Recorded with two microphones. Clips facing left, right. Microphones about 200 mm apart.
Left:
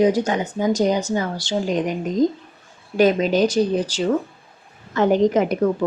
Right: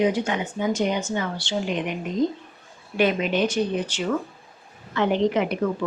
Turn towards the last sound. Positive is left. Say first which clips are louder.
# left 5 dB
turn(degrees=40)  # may be behind; listen again after turning